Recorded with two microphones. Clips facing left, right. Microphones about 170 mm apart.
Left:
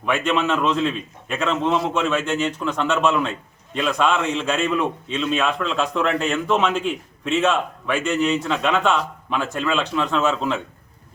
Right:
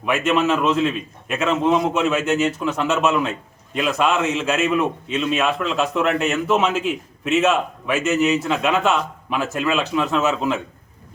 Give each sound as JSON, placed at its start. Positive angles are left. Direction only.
{"t": 0.0, "sound": "a man's voice", "side_deg": -5}